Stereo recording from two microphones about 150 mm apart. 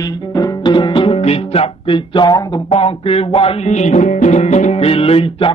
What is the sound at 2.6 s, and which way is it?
Music, 40° left (ahead or behind).